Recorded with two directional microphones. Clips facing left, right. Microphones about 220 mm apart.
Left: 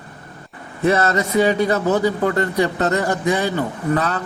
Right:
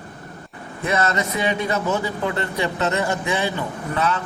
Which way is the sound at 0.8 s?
35° left (ahead or behind).